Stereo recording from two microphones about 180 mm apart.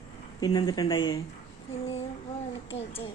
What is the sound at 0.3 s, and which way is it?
Speech, 20° left (ahead or behind).